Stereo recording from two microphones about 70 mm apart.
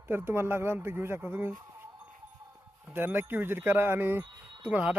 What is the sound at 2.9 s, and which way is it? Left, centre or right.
Speech, right.